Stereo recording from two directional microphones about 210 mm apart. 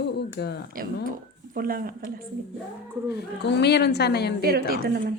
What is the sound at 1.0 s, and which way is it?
Speech, 45° right (ahead or behind).